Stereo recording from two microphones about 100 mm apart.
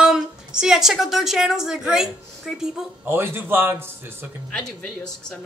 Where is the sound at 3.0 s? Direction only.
20° right (ahead or behind).